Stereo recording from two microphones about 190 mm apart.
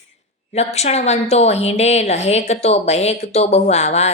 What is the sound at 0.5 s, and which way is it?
A woman's voice, 35° left (ahead or behind).